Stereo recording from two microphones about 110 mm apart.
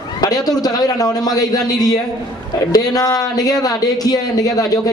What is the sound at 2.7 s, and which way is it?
A man's voice, 35° left (ahead or behind).